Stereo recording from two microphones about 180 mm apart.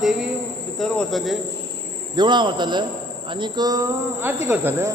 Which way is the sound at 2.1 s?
25° right (ahead or behind).